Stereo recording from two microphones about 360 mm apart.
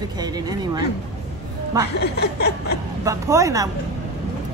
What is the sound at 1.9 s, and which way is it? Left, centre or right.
Snicker, left.